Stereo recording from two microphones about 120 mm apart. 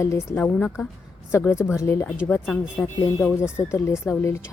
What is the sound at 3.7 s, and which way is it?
Speech, 25° left (ahead or behind).